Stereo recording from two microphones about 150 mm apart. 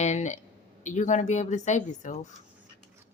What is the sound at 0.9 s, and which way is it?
A woman's voice, 55° left (ahead or behind).